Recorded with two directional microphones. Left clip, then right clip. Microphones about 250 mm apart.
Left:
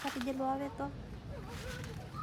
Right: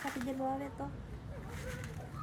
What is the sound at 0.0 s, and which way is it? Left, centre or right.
Speech, centre.